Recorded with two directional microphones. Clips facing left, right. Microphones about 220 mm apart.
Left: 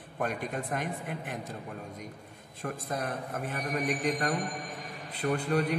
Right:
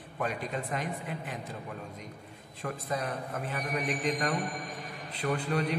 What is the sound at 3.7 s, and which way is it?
Music, 45° left (ahead or behind).